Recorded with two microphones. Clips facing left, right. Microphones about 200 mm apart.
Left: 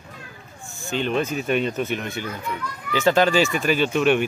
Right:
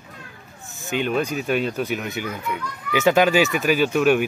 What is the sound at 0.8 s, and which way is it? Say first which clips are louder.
A child's voice: right 1 dB; 10° right (ahead or behind).